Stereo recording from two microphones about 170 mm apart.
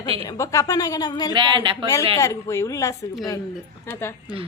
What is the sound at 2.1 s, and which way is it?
A woman's voice, 20° left (ahead or behind).